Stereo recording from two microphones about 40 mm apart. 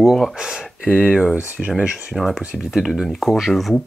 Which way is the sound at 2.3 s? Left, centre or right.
Centre.